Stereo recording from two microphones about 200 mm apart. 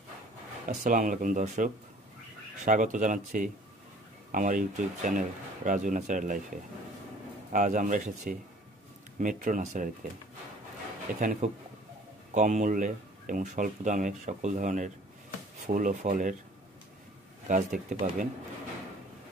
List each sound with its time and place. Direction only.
0.7 s speech: 40° right (ahead or behind)
7.5 s speech: 40° right (ahead or behind)
11.1 s speech: 40° right (ahead or behind)
17.5 s speech: 40° right (ahead or behind)